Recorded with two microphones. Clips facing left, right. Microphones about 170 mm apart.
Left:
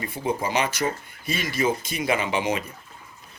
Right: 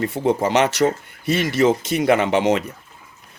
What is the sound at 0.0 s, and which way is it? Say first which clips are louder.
Speech: right 8 dB; 70° right (ahead or behind).